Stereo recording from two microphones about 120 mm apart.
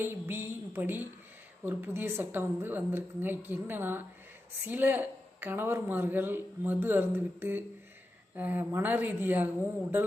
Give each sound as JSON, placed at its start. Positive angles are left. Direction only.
{"t": 0.0, "sound": "a woman's voice", "side_deg": -20}